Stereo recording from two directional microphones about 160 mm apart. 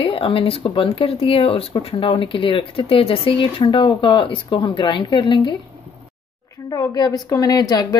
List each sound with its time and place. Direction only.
0.0 s speech: 35° left (ahead or behind)
6.7 s a woman's voice: 25° left (ahead or behind)